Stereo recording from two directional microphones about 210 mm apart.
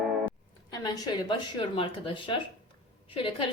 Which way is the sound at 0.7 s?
20° left (ahead or behind).